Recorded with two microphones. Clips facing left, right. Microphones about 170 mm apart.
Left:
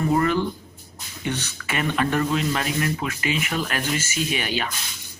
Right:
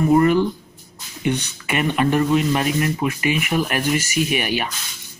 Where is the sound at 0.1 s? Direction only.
15° right (ahead or behind).